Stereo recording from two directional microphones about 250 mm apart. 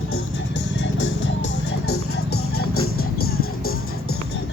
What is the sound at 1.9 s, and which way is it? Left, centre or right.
Music, left.